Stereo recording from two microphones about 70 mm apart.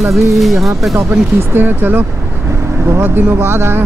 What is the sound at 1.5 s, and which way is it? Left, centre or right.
Speech, right.